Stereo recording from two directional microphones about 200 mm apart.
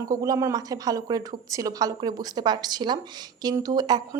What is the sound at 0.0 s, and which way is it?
A woman's voice, 15° right (ahead or behind).